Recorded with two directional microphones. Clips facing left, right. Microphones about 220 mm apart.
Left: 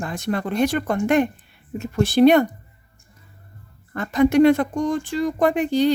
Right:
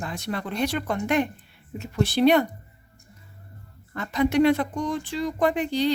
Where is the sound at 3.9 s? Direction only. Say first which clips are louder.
Left 5 dB; 50° left (ahead or behind).